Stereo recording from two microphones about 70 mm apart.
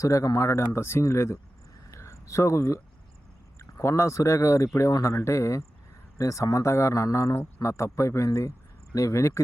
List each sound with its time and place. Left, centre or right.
0.0 s speech: left
1.9 s a sound: left
3.6 s speech: left